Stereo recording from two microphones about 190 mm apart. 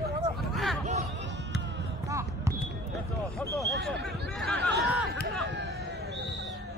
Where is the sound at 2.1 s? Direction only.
15° right (ahead or behind).